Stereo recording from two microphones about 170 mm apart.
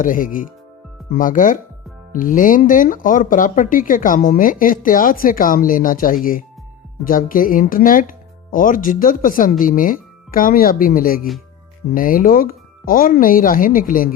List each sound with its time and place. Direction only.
0.0 s speech: 55° left (ahead or behind)